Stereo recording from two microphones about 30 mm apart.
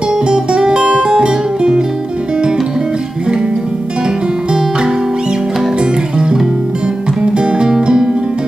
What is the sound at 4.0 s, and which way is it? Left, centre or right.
Music, right.